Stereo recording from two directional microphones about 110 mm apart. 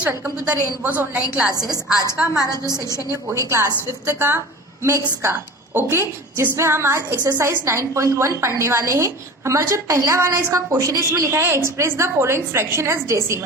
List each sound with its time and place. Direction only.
0.4 s a woman's voice: 15° right (ahead or behind)
2.6 s a woman's voice: 35° right (ahead or behind)
3.1 s a woman's voice: 25° right (ahead or behind)